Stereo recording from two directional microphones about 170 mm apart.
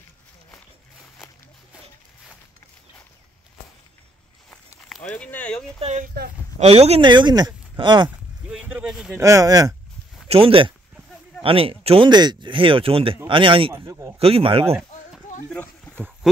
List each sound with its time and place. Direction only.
5.0 s speech: 10° left (ahead or behind)
5.8 s speech: 40° right (ahead or behind)
8.5 s a sound: 5° right (ahead or behind)
9.1 s speech: 20° right (ahead or behind)
10.2 s speech: 35° right (ahead or behind)
15.4 s a sound: 10° left (ahead or behind)